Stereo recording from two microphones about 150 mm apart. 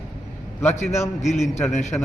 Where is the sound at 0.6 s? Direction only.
15° left (ahead or behind).